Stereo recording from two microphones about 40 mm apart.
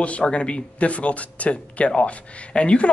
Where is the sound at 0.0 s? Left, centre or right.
Left.